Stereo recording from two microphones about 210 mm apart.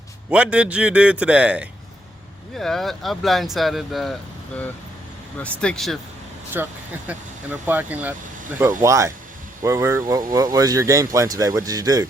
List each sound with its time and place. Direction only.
0.3 s speech: 5° right (ahead or behind)
6.5 s speech: 10° right (ahead or behind)